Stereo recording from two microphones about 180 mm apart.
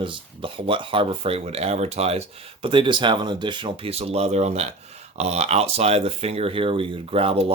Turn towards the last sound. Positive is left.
turn(degrees=-30)  # may be behind; listen again after turning